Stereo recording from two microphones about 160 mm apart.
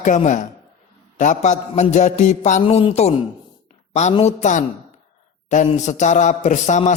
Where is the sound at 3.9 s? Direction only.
45° left (ahead or behind).